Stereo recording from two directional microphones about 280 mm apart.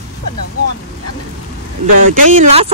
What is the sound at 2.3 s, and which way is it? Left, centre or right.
Speech, right.